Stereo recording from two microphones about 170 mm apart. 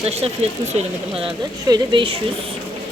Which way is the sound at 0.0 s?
35° right (ahead or behind).